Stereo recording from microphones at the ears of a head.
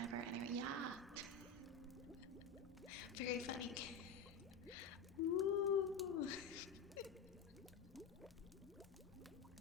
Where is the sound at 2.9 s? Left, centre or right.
Left.